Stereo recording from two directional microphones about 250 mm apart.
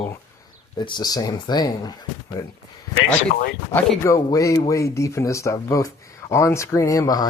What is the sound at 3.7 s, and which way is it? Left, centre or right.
Speech, centre.